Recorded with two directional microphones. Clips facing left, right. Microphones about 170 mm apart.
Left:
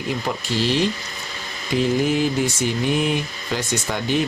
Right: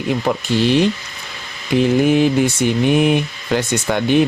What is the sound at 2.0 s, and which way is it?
Speech, 60° right (ahead or behind).